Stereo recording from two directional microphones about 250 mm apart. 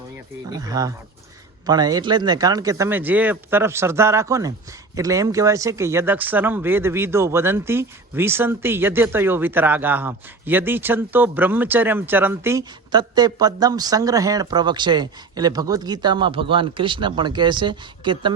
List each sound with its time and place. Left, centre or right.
0.5 s speech: centre